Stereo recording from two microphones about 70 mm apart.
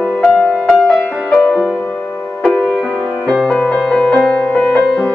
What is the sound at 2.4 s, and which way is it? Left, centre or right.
Music, centre.